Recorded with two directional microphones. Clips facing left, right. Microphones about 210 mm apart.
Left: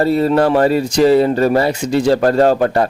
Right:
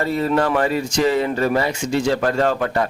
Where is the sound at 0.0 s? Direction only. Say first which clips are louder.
Left 6 dB; 35° left (ahead or behind).